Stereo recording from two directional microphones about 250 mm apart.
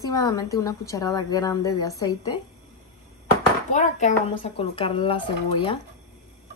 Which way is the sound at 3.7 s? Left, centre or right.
Left.